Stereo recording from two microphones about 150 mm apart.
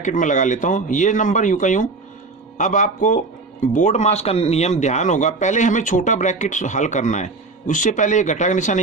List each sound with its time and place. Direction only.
0.0 s speech: 55° left (ahead or behind)